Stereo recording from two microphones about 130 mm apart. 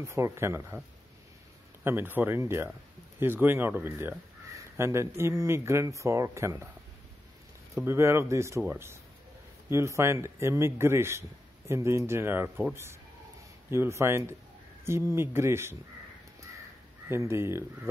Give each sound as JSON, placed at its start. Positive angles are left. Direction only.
{"t": 0.0, "sound": "a man's voice", "side_deg": -20}
{"t": 1.9, "sound": "a man's voice", "side_deg": -15}
{"t": 7.8, "sound": "a man's voice", "side_deg": -20}
{"t": 13.7, "sound": "a man's voice", "side_deg": -20}
{"t": 17.1, "sound": "a man's voice", "side_deg": -20}